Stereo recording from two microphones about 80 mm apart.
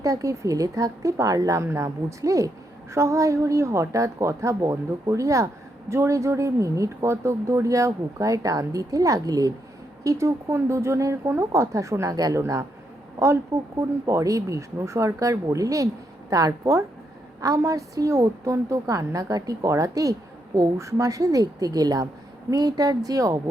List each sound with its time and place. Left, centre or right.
0.0 s speech: right
10.0 s speech: right